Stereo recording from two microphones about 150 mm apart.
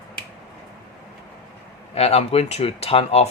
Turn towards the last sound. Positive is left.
turn(degrees=45)  # may be behind; listen again after turning